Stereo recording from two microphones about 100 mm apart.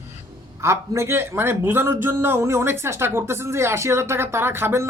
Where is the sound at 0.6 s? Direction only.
25° right (ahead or behind).